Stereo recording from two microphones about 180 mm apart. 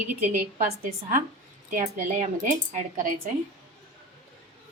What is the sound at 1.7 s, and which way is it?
A woman's voice, 45° right (ahead or behind).